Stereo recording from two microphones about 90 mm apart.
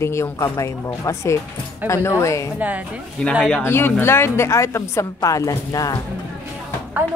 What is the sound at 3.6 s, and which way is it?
Speech, 25° left (ahead or behind).